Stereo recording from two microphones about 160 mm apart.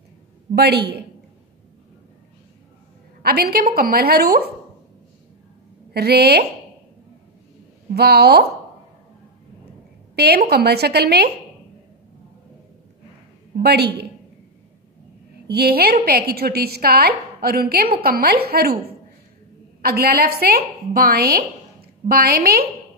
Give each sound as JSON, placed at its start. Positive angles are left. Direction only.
{"t": 0.6, "sound": "speech", "side_deg": -85}
{"t": 3.2, "sound": "a woman's voice", "side_deg": -75}
{"t": 5.9, "sound": "a woman's voice", "side_deg": -90}
{"t": 7.9, "sound": "speech", "side_deg": -90}
{"t": 10.1, "sound": "a woman's voice", "side_deg": -80}
{"t": 13.6, "sound": "a woman's voice", "side_deg": -90}
{"t": 15.4, "sound": "a woman's voice", "side_deg": -80}
{"t": 19.8, "sound": "a woman's voice", "side_deg": -75}